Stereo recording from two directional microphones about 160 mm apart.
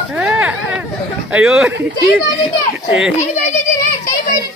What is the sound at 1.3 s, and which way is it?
Speech, 5° right (ahead or behind).